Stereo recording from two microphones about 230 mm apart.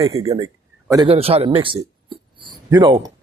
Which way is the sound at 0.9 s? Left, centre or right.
Right.